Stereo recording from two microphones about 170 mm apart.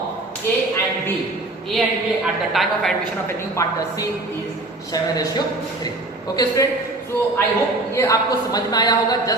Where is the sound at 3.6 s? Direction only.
15° left (ahead or behind).